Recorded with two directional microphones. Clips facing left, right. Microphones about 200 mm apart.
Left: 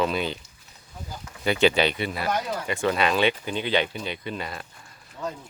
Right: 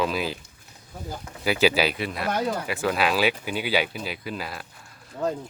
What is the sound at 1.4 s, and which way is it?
Speech, 5° right (ahead or behind).